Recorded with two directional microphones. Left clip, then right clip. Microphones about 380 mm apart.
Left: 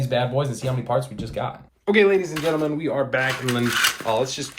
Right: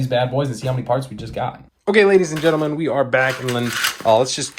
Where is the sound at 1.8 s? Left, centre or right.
Centre.